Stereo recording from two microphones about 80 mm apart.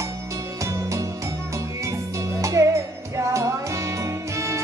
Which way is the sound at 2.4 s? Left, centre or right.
Right.